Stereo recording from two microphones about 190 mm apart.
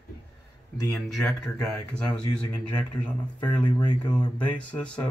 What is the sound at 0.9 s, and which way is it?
Speech, centre (ahead or behind).